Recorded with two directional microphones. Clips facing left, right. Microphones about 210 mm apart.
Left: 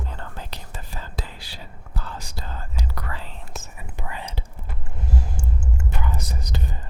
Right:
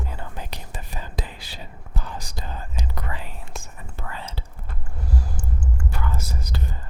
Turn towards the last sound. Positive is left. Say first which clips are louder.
# even
turn(degrees=20)  # may be behind; listen again after turning